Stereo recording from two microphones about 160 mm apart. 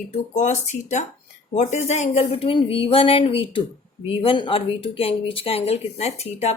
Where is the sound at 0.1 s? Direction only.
45° left (ahead or behind).